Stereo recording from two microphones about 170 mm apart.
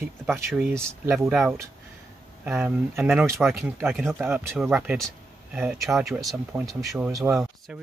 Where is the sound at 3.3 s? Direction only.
Centre (ahead or behind).